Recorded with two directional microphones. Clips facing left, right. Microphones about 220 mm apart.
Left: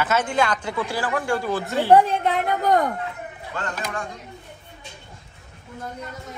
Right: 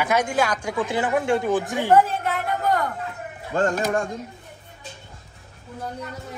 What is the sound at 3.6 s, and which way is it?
Speech, 45° right (ahead or behind).